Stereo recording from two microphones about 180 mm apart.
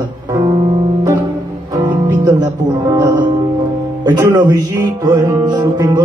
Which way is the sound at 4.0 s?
20° right (ahead or behind).